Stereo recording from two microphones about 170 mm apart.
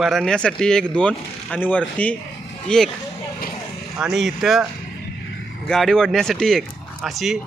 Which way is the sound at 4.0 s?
Centre (ahead or behind).